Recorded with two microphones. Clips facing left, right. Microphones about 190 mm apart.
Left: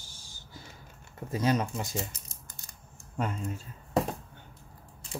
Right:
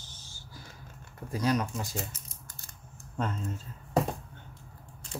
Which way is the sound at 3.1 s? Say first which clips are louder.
Left 1 dB; 10° left (ahead or behind).